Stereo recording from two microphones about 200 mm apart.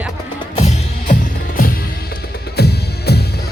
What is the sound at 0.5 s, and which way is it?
Music, 35° left (ahead or behind).